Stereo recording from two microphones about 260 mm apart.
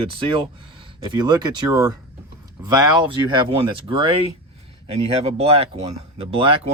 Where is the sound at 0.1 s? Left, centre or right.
Centre.